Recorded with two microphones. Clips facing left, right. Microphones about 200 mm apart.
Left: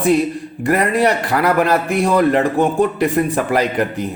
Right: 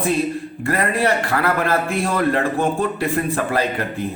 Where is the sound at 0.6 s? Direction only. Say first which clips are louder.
Left 5 dB; 15° left (ahead or behind).